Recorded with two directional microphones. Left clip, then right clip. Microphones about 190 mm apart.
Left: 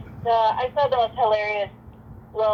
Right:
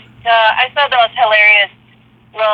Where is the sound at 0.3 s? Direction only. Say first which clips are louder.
Right 9 dB; 55° right (ahead or behind).